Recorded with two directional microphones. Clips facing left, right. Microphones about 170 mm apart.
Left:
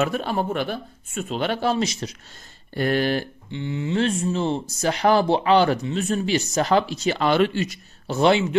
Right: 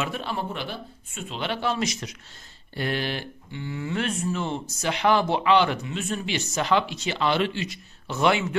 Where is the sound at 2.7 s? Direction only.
45° left (ahead or behind).